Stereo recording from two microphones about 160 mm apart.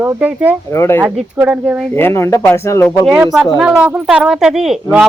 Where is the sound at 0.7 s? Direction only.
15° left (ahead or behind).